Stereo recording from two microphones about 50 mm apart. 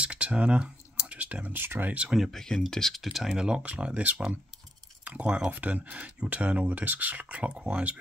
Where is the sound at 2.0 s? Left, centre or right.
Centre.